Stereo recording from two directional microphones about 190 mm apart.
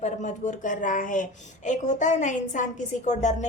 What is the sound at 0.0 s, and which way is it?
A woman's voice, 40° left (ahead or behind).